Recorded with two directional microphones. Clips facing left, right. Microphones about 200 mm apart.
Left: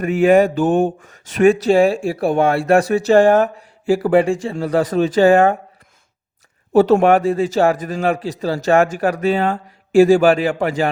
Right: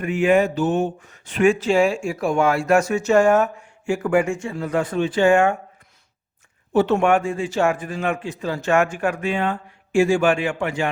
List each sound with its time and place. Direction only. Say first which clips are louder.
0.0 s speech: left 5 dB; 45° left (ahead or behind)
6.7 s speech: left 5 dB; 35° left (ahead or behind)